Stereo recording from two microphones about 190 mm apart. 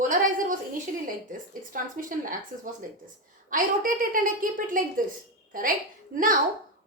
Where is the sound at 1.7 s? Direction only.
45° right (ahead or behind).